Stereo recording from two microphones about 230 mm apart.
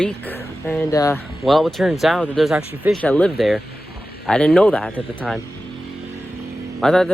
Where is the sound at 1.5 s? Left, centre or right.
Centre.